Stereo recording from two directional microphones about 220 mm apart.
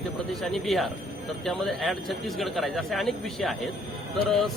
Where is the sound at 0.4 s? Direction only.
Centre (ahead or behind).